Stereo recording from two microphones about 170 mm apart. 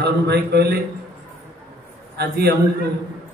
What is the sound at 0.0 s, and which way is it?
Speech, 75° right (ahead or behind).